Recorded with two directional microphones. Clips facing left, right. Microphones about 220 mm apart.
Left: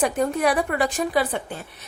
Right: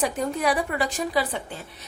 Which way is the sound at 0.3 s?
55° left (ahead or behind).